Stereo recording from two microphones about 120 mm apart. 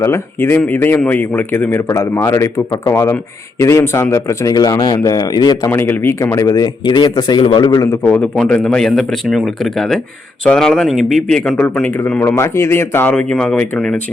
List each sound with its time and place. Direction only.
0.0 s speech: 20° left (ahead or behind)
5.7 s speech: 20° left (ahead or behind)
8.0 s a man's voice: 15° left (ahead or behind)